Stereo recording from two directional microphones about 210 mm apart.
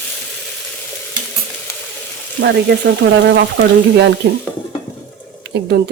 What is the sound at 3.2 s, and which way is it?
Speech, 55° right (ahead or behind).